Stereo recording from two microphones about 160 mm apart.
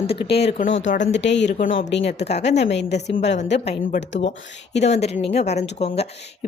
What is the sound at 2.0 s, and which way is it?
Speech, 45° left (ahead or behind).